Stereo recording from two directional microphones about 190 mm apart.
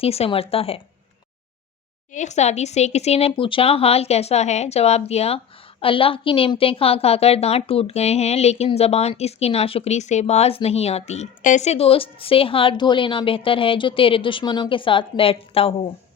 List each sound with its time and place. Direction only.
0.0 s a woman's voice: 30° left (ahead or behind)
2.1 s a woman's voice: 35° left (ahead or behind)